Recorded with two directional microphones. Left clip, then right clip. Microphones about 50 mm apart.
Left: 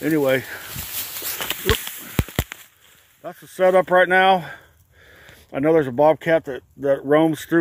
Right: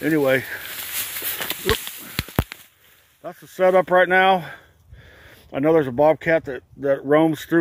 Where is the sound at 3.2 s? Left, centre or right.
Centre.